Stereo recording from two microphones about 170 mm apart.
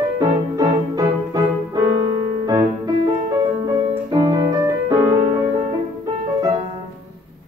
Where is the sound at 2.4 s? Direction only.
20° right (ahead or behind).